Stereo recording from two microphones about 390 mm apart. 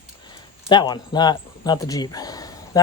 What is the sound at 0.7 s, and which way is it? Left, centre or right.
Speech, centre.